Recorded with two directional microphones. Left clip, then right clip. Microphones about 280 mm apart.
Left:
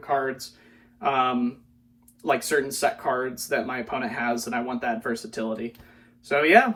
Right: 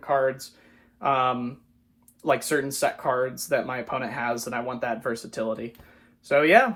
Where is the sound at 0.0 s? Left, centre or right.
Right.